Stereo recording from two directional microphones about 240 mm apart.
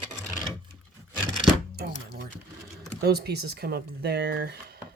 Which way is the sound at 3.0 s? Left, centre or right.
Right.